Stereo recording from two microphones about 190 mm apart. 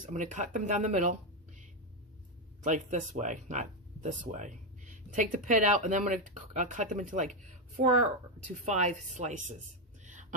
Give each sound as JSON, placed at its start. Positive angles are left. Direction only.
{"t": 0.0, "sound": "speech", "side_deg": -40}
{"t": 2.6, "sound": "speech", "side_deg": -40}